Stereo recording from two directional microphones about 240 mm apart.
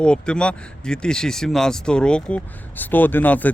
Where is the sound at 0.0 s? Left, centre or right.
Centre.